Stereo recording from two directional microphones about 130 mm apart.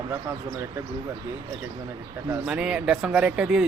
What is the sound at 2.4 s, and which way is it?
A man's voice, 5° right (ahead or behind).